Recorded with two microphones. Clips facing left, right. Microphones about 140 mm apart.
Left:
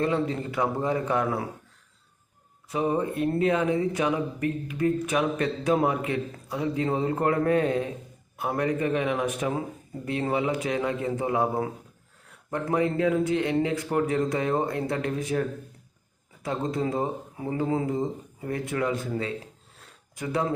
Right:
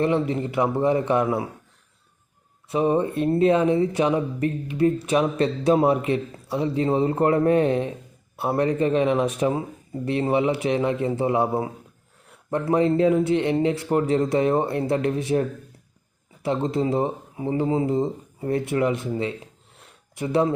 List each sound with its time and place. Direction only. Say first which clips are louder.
0.0 s speech: right 4 dB; 25° right (ahead or behind)
2.6 s speech: right 5 dB; 25° right (ahead or behind)
19.8 s sniff: right 5 dB; 25° right (ahead or behind)